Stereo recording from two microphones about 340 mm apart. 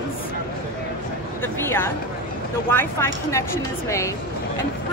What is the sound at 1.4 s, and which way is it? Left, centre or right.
Speech, centre.